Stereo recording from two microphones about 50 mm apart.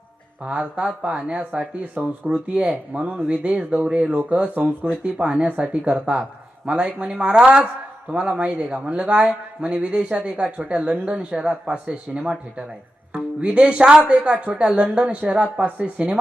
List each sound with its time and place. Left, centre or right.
0.4 s a man's voice: right
4.9 s a man's voice: centre
15.6 s a man's voice: right